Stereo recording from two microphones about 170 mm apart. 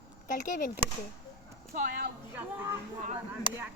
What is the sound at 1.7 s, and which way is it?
Speech, 65° right (ahead or behind).